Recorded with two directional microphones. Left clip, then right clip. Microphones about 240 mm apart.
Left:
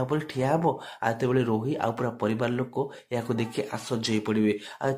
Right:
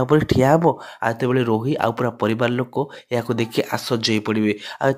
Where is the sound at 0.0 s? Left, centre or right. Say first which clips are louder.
Right 11 dB; right.